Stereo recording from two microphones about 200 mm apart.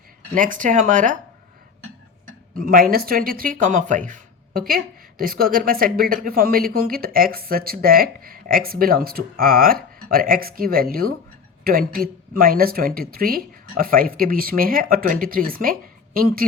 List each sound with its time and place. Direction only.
0.3 s speech: 40° right (ahead or behind)
2.6 s speech: 45° right (ahead or behind)